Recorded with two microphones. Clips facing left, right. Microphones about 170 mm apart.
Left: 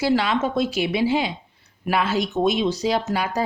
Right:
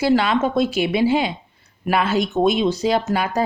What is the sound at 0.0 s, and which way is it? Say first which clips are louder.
A woman's voice: right 3 dB; 50° right (ahead or behind).